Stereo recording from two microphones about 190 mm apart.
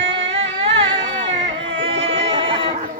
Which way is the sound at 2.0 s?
30° right (ahead or behind).